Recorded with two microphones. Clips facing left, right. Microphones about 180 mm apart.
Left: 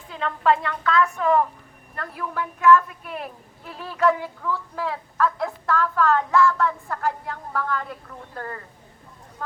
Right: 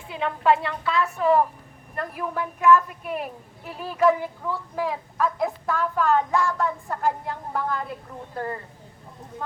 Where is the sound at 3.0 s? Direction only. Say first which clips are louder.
Right 3 dB; 10° right (ahead or behind).